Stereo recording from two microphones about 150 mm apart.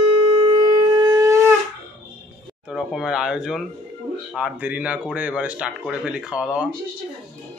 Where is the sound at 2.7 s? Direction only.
5° right (ahead or behind).